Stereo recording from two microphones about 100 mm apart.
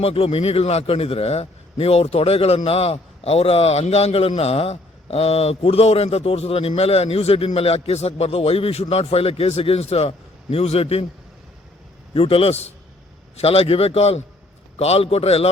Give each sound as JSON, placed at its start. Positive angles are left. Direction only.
{"t": 0.0, "sound": "a man's voice", "side_deg": 75}
{"t": 12.1, "sound": "a man's voice", "side_deg": 70}